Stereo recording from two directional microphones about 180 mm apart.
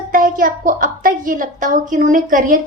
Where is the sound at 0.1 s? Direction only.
50° right (ahead or behind).